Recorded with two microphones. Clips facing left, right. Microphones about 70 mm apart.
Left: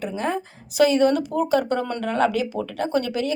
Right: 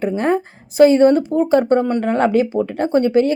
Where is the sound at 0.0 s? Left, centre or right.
Right.